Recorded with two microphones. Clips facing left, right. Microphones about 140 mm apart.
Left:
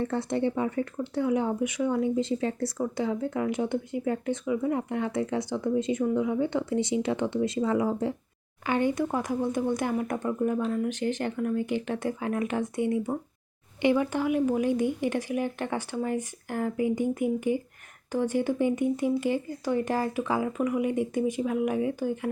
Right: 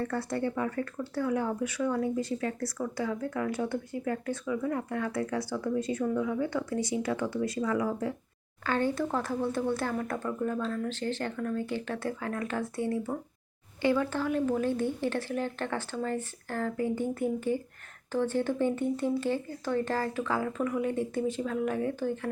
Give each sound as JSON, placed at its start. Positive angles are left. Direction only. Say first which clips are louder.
{"t": 0.0, "sound": "speech", "louder": "left 4 dB", "side_deg": 20}